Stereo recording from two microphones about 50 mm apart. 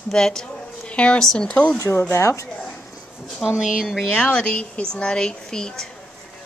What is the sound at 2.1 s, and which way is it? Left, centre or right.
Speech, left.